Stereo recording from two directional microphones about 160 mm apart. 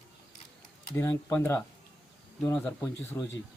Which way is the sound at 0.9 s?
15° left (ahead or behind).